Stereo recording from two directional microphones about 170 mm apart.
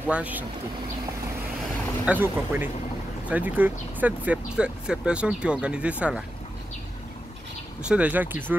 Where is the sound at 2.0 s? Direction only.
10° right (ahead or behind).